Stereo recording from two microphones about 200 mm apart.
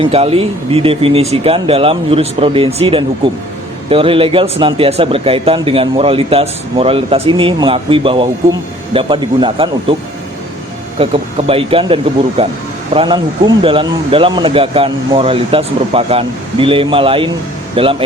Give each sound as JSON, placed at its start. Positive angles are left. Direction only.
{"t": 0.0, "sound": "speech", "side_deg": -30}
{"t": 10.9, "sound": "speech", "side_deg": -30}